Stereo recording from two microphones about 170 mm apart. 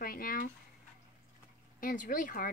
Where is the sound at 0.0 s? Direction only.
55° left (ahead or behind).